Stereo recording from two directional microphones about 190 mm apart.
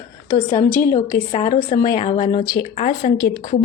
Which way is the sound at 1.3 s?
30° left (ahead or behind).